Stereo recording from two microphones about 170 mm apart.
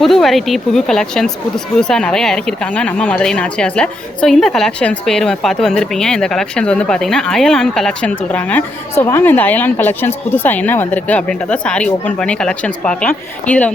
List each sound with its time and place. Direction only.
0.0 s speech: centre (ahead or behind)